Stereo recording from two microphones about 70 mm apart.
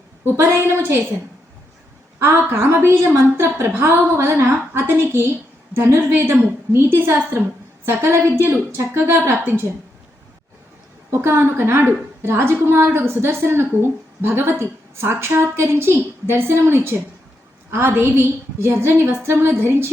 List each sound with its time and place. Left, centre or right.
0.3 s a woman's voice: right
2.1 s a woman's voice: right
11.1 s a woman's voice: right